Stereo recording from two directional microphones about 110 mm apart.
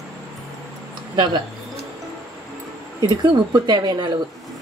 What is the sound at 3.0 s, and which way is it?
Speech, 40° right (ahead or behind).